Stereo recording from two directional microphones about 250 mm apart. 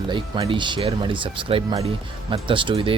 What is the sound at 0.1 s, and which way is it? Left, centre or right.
Speech, centre.